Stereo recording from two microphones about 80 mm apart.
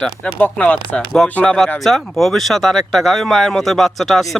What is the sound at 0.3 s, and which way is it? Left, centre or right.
Speech, centre.